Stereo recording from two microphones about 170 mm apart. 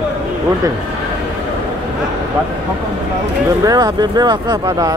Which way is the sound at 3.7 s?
25° right (ahead or behind).